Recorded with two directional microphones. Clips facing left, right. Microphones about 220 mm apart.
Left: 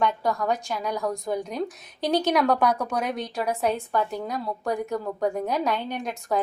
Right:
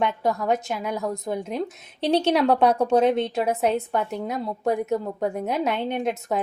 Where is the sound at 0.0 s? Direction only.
25° right (ahead or behind).